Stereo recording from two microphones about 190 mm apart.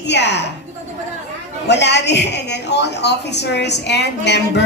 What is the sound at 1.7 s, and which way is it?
A man's voice, 65° left (ahead or behind).